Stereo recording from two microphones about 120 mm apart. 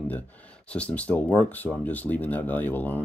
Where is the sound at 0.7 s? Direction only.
10° left (ahead or behind).